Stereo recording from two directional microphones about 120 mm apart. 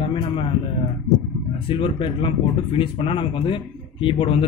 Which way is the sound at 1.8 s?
45° left (ahead or behind).